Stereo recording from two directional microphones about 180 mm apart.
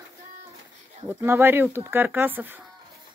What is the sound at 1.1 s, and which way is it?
Speech, 15° right (ahead or behind).